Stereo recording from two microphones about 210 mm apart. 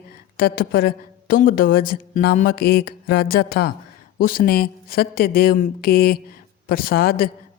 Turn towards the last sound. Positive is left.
turn(degrees=45)  # may be behind; listen again after turning